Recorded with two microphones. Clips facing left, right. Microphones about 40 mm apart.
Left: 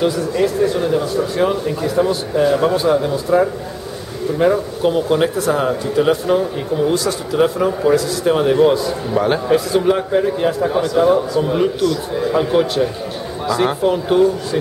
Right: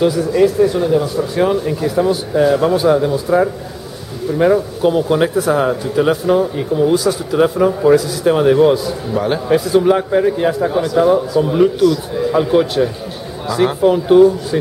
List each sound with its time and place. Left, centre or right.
0.0 s speech: centre